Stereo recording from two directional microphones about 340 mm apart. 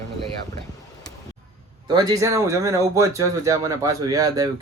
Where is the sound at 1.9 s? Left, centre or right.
Centre.